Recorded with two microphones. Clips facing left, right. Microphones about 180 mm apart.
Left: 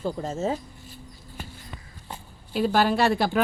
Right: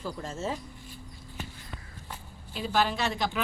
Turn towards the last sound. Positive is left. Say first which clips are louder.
# left 8 dB
turn(degrees=50)  # may be behind; listen again after turning